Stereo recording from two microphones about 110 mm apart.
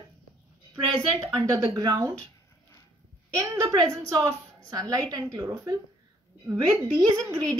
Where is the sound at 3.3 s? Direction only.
30° right (ahead or behind).